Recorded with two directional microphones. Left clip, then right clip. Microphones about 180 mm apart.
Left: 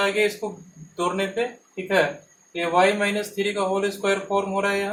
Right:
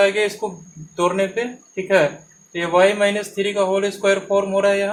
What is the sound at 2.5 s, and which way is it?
Speech, 50° right (ahead or behind).